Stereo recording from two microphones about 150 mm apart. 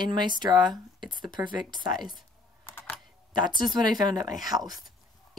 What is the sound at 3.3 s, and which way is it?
Speech, 30° right (ahead or behind).